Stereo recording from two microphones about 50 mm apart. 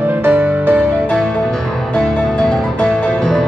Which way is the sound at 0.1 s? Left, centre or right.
Right.